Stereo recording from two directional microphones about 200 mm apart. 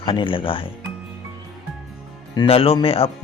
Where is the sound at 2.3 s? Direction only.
30° left (ahead or behind).